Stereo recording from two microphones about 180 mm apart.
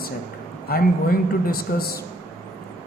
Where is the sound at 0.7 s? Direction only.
55° left (ahead or behind).